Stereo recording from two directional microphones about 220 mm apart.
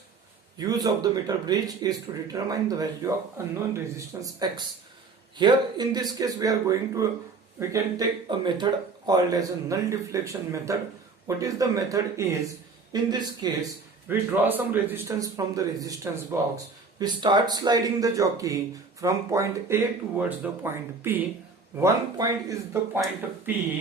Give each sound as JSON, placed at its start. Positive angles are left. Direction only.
{"t": 0.6, "sound": "speech", "side_deg": -15}